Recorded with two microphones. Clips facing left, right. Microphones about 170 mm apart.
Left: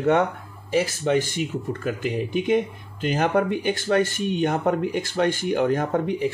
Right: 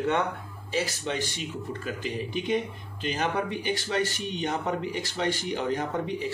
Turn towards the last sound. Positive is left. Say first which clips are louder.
# left 6 dB
turn(degrees=55)  # may be behind; listen again after turning